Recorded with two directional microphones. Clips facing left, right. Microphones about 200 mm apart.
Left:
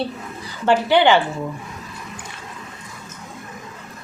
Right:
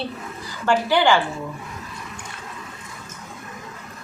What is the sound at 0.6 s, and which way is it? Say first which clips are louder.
Speech: left 3 dB; 20° left (ahead or behind).